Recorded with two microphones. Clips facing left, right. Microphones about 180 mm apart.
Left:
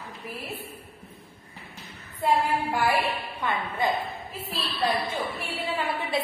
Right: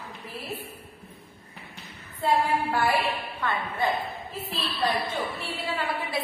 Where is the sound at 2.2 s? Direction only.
10° left (ahead or behind).